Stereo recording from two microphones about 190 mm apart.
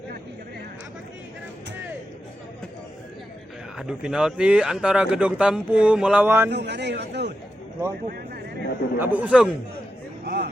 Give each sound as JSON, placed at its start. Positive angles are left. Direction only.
{"t": 3.8, "sound": "a man's voice", "side_deg": -5}
{"t": 6.5, "sound": "a man's voice", "side_deg": -65}
{"t": 9.0, "sound": "a man's voice", "side_deg": -10}
{"t": 10.2, "sound": "a sound", "side_deg": -55}